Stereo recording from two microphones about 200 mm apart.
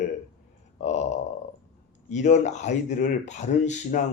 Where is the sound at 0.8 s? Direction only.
35° left (ahead or behind).